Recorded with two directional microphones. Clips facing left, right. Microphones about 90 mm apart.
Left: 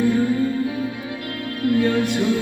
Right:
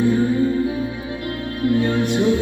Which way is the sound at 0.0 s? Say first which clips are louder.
Right 1 dB; 25° right (ahead or behind).